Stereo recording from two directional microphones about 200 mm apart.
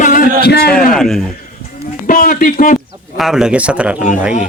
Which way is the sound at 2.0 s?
45° left (ahead or behind).